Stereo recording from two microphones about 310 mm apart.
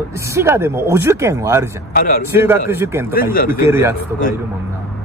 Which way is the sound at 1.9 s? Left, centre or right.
Left.